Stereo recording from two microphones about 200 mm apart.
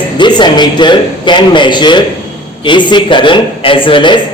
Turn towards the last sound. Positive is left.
turn(degrees=25)  # may be behind; listen again after turning